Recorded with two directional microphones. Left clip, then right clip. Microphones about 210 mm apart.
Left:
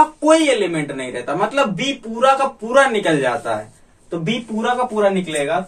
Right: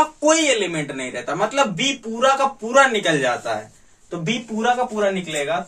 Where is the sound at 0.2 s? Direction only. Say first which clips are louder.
Left 3 dB; 15° right (ahead or behind).